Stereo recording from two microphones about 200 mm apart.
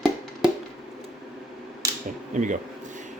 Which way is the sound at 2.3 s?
40° right (ahead or behind).